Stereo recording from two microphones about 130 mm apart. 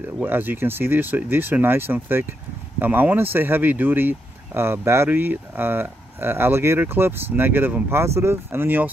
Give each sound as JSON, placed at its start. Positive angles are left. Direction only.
{"t": 0.2, "sound": "speech", "side_deg": -15}